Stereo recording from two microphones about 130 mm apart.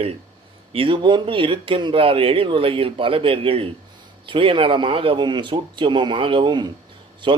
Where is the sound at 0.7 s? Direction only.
45° right (ahead or behind).